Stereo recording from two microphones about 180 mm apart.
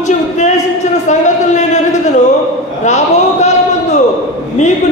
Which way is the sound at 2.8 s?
40° left (ahead or behind).